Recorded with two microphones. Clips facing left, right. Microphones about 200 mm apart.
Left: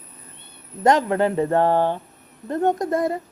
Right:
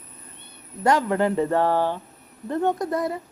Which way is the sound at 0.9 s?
20° left (ahead or behind).